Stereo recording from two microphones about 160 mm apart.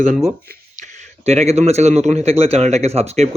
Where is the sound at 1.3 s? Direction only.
40° right (ahead or behind).